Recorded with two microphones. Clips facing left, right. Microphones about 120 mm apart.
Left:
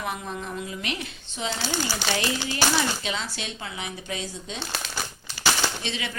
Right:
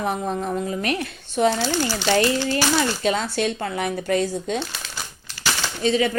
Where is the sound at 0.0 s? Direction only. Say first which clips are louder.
Right 8 dB; 40° right (ahead or behind); by 1.5 s 55° right (ahead or behind).